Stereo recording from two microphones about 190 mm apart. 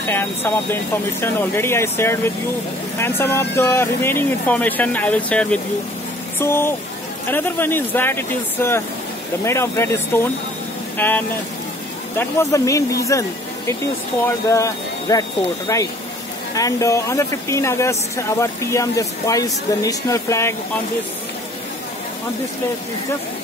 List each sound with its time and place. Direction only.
0.1 s speech: 10° left (ahead or behind)